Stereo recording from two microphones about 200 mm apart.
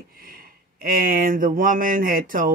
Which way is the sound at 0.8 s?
45° right (ahead or behind).